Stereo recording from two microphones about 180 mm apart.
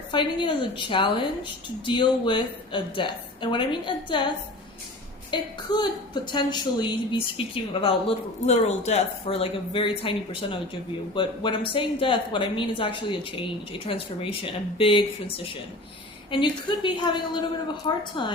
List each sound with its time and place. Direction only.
0.1 s a woman's voice: 25° left (ahead or behind)
5.3 s a woman's voice: 25° left (ahead or behind)